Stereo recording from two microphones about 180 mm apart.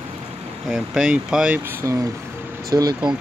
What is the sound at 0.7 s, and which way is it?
Speech, 5° right (ahead or behind).